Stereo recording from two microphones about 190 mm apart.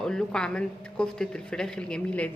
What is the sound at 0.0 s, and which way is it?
Speech, 5° left (ahead or behind).